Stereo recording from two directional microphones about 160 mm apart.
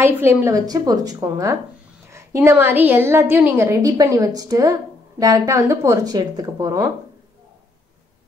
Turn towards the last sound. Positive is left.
turn(degrees=-20)  # may be behind; listen again after turning